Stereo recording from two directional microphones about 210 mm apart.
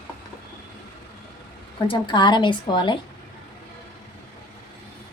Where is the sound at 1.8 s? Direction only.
25° left (ahead or behind).